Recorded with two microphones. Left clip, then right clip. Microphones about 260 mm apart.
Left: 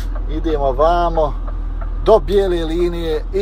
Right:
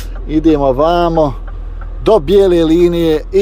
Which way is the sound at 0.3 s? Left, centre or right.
Right.